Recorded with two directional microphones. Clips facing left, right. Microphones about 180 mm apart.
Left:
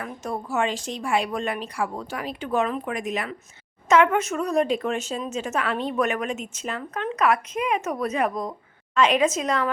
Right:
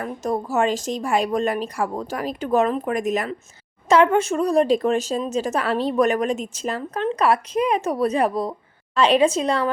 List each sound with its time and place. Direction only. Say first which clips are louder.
0.0 s speech: right 6 dB; 40° right (ahead or behind)